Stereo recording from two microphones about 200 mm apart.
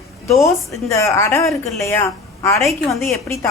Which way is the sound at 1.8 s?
15° left (ahead or behind).